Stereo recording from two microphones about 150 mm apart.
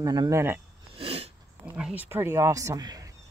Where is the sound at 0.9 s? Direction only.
40° right (ahead or behind).